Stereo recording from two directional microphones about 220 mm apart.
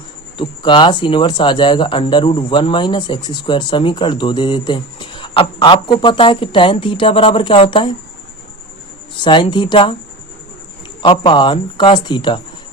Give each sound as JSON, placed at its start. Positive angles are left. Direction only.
{"t": 0.3, "sound": "speech", "side_deg": 20}
{"t": 9.2, "sound": "speech", "side_deg": 20}
{"t": 11.0, "sound": "speech", "side_deg": 20}